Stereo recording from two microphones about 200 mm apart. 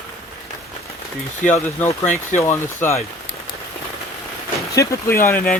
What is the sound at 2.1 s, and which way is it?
Speech, 35° left (ahead or behind).